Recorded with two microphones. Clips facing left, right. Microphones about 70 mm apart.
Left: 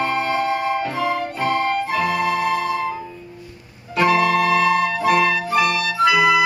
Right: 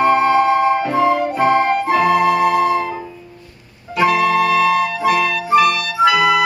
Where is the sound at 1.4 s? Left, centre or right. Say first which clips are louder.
Right 5 dB; right.